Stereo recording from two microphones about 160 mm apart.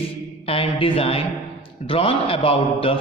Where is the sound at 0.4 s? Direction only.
35° left (ahead or behind).